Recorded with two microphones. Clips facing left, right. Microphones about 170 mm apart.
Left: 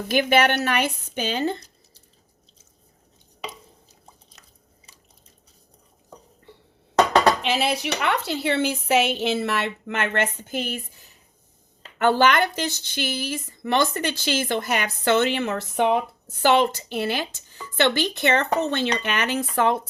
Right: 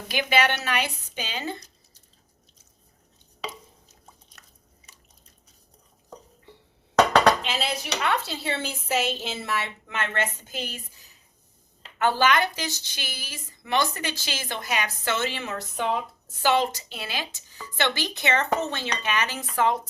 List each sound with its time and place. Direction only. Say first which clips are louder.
0.1 s speech: left 5 dB; 50° left (ahead or behind)
7.4 s a woman's voice: left 6 dB; 65° left (ahead or behind)